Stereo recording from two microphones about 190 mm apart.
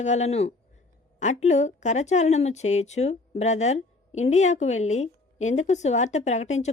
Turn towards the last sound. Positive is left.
turn(degrees=35)  # may be behind; listen again after turning